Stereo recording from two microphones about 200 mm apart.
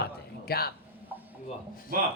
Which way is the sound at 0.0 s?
50° left (ahead or behind).